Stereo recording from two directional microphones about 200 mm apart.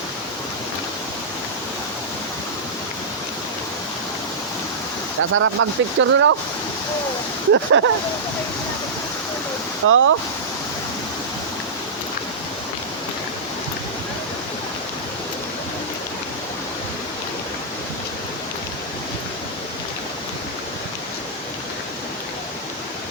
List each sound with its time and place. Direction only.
5.3 s speech: 90° right; by 6.3 s 75° right (ahead or behind)
7.5 s speech: 90° right
9.8 s speech: 90° right